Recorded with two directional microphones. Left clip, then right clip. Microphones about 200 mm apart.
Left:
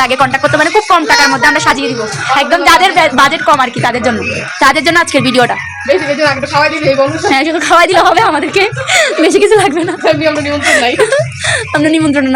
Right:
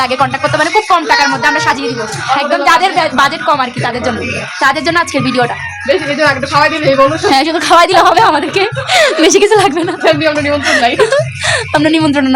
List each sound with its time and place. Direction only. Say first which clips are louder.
0.0 s speech: left 2 dB; 10° left (ahead or behind)
6.6 s a man's voice: even; 20° right (ahead or behind)
7.3 s a woman's voice: even; centre (ahead or behind)
9.0 s speech: right 1 dB; 15° right (ahead or behind)
9.3 s a woman's voice: even; 5° right (ahead or behind)
10.9 s a woman's voice: even; 5° left (ahead or behind)